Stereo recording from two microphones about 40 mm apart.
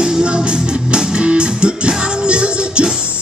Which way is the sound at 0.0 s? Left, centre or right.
Centre.